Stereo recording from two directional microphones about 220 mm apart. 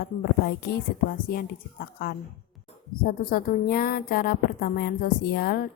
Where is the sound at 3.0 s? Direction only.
40° left (ahead or behind).